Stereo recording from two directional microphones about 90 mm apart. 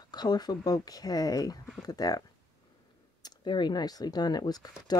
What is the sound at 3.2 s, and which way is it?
Speech, 55° left (ahead or behind).